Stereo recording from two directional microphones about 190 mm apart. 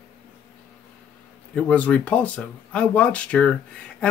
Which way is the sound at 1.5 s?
5° left (ahead or behind).